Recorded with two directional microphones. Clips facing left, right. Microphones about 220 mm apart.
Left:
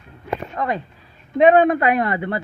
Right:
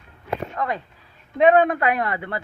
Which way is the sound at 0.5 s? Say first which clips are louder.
Left 3 dB; 20° left (ahead or behind).